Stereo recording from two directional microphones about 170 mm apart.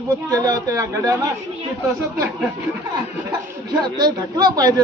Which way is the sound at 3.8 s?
25° right (ahead or behind).